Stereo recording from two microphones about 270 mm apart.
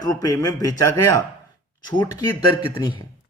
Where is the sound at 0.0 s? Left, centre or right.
Centre.